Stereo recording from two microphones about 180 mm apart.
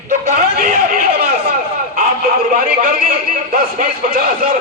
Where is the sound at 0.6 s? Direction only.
55° right (ahead or behind).